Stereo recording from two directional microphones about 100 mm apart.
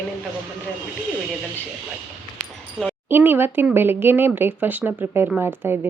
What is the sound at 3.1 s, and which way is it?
Speech, 20° right (ahead or behind).